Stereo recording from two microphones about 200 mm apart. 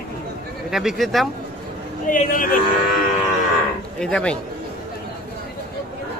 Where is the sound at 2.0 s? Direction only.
40° left (ahead or behind).